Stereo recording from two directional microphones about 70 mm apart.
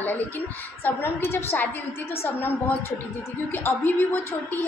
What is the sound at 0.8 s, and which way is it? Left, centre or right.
A woman's voice, left.